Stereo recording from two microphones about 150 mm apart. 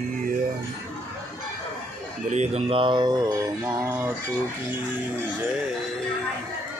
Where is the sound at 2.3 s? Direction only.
45° right (ahead or behind); by 3.8 s 25° right (ahead or behind).